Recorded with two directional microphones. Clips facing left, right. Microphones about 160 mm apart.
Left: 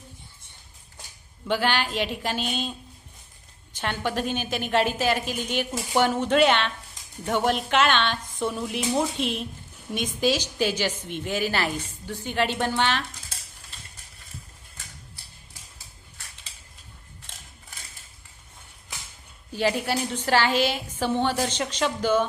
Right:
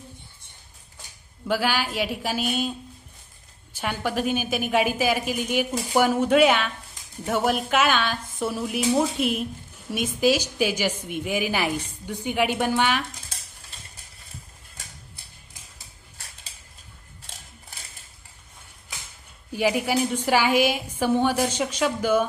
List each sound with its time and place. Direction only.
1.5 s a woman's voice: 5° right (ahead or behind)
19.5 s a woman's voice: 10° right (ahead or behind)